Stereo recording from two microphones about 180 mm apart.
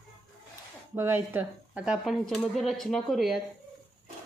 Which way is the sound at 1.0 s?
10° right (ahead or behind).